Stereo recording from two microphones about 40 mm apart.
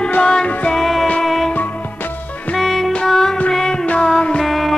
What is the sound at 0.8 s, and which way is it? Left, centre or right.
Music, centre.